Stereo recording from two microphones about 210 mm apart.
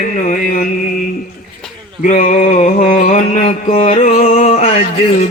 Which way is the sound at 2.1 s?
35° left (ahead or behind).